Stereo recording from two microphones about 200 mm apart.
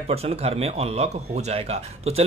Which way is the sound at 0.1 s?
30° right (ahead or behind).